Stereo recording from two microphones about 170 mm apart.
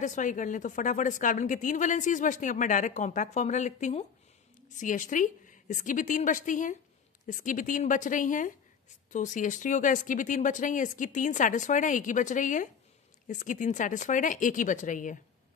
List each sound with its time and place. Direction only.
0.0 s a woman's voice: 45° left (ahead or behind)